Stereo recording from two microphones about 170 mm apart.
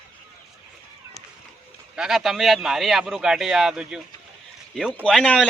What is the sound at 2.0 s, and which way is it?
Speech, centre (ahead or behind).